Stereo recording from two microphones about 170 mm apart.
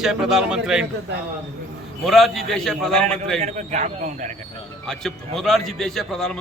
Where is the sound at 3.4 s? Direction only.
45° right (ahead or behind).